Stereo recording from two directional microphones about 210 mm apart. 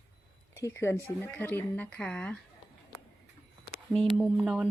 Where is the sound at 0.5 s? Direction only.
15° left (ahead or behind).